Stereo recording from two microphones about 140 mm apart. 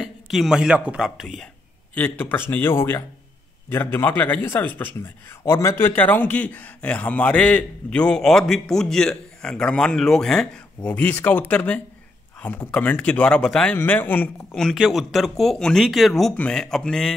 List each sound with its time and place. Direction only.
0.0 s speech: centre (ahead or behind)
2.0 s a man's voice: 15° left (ahead or behind)